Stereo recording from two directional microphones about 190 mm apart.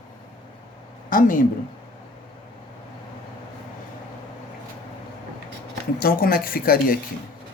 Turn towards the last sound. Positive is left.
turn(degrees=50)  # may be behind; listen again after turning